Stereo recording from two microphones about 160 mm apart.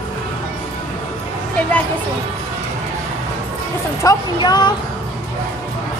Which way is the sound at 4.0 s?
25° left (ahead or behind).